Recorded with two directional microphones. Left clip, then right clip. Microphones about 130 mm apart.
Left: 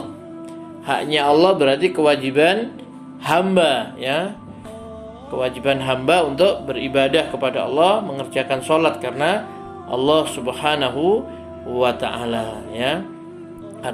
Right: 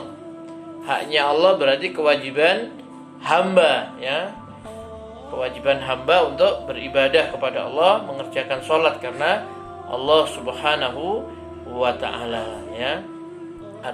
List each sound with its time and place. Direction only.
0.9 s a man's voice: 55° left (ahead or behind)
5.4 s a man's voice: 50° left (ahead or behind)